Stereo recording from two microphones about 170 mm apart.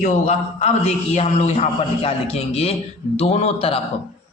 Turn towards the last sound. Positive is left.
turn(degrees=35)  # may be behind; listen again after turning